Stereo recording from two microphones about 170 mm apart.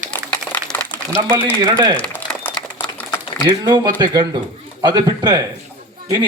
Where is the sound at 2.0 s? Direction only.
10° left (ahead or behind).